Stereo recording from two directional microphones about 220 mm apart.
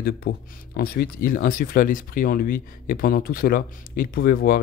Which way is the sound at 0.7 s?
45° left (ahead or behind).